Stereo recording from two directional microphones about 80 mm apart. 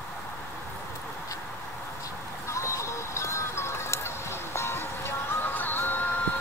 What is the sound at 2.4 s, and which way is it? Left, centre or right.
Music, left.